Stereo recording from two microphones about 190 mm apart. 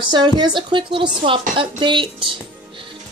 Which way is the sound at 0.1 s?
20° right (ahead or behind).